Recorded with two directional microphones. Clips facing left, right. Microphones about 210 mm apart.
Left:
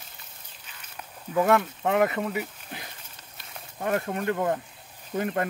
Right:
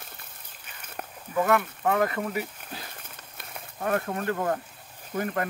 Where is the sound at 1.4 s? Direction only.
25° left (ahead or behind).